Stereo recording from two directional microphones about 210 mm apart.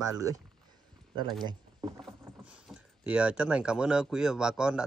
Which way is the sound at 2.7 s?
5° right (ahead or behind).